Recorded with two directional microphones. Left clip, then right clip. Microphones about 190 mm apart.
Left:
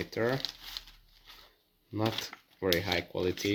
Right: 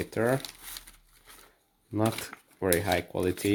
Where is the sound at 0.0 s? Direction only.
45° right (ahead or behind).